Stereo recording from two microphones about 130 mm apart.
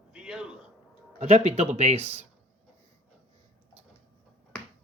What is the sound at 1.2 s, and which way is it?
Speech, 55° right (ahead or behind).